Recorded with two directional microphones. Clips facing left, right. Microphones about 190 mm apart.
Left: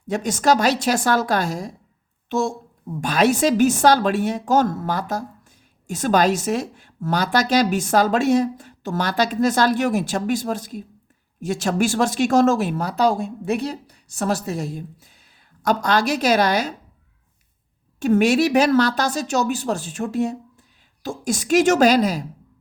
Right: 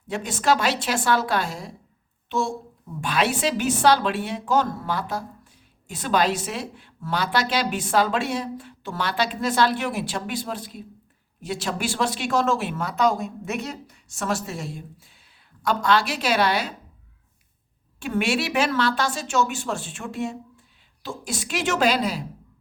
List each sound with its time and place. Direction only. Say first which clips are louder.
0.1 s a woman's voice: left 4 dB; 40° left (ahead or behind)
18.0 s speech: left 8 dB; 40° left (ahead or behind)